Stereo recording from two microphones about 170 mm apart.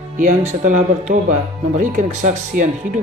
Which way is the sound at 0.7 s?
45° right (ahead or behind).